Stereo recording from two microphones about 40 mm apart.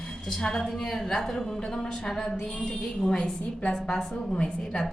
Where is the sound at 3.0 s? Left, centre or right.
Left.